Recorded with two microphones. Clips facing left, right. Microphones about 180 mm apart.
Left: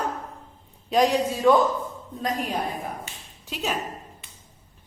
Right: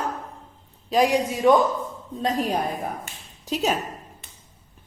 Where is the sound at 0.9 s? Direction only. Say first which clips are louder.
Right 1 dB; 10° right (ahead or behind).